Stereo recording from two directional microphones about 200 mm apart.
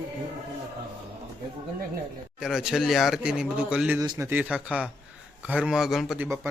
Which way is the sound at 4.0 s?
15° right (ahead or behind).